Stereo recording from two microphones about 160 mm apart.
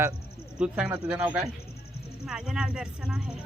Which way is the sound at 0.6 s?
5° right (ahead or behind).